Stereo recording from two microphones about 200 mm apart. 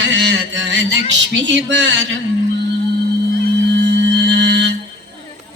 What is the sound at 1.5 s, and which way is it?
Speech, 65° right (ahead or behind).